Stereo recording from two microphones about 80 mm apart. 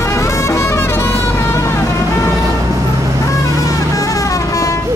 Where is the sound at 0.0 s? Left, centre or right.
Left.